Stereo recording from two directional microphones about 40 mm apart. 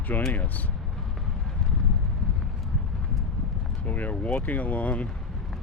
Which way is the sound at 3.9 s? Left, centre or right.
Left.